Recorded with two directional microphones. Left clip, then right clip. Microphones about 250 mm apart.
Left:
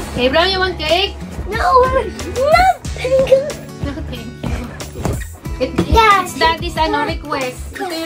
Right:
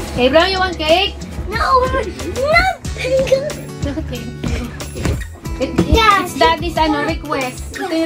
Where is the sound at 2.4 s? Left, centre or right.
Left.